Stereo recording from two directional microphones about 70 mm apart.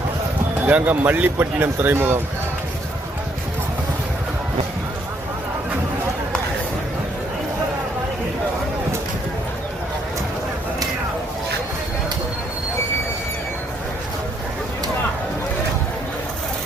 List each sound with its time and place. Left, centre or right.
0.7 s a man's voice: right